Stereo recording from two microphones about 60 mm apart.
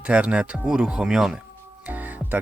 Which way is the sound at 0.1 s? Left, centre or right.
Centre.